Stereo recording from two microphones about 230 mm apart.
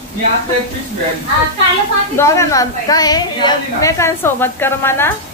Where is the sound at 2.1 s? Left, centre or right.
Centre.